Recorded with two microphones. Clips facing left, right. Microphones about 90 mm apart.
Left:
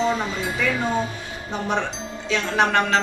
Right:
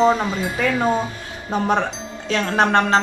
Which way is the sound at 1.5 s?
45° right (ahead or behind).